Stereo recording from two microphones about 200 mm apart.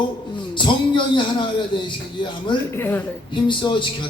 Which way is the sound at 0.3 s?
25° left (ahead or behind).